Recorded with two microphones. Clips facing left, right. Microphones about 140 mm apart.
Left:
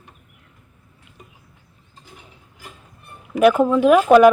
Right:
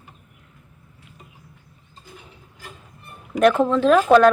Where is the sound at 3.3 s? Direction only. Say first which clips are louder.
Left 2 dB; 5° left (ahead or behind).